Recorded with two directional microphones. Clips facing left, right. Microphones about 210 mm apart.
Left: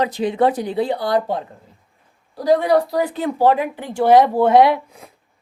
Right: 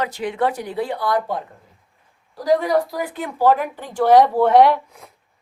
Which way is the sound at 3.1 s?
25° left (ahead or behind).